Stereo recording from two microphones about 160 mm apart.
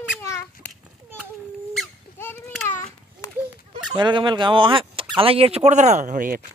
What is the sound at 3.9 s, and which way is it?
Speech, 30° right (ahead or behind).